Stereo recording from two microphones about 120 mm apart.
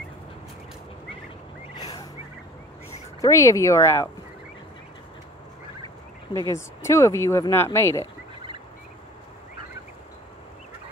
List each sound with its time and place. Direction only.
1.8 s a sound: 35° left (ahead or behind)
3.2 s speech: 25° left (ahead or behind)
6.5 s speech: 25° left (ahead or behind)